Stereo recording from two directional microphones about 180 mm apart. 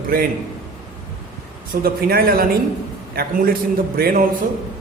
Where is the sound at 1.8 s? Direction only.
55° right (ahead or behind).